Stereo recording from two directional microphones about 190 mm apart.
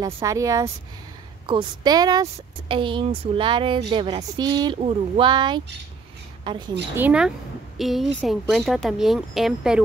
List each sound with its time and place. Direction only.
0.0 s a woman's voice: 15° right (ahead or behind)
7.0 s a woman's voice: 5° right (ahead or behind)